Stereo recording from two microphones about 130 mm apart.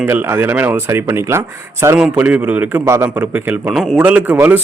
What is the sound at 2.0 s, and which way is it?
A man's voice, 10° right (ahead or behind).